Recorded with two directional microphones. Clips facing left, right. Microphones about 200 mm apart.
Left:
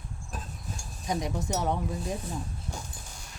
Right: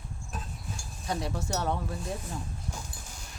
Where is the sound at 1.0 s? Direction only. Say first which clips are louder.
Left 2 dB; 15° left (ahead or behind).